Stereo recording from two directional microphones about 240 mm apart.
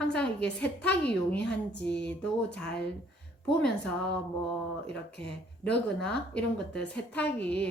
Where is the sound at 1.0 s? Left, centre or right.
Centre.